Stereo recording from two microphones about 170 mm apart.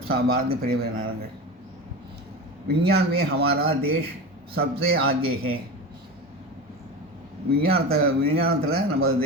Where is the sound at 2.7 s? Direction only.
70° right (ahead or behind).